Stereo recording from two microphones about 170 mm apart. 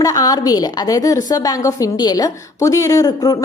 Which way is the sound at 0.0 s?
20° left (ahead or behind).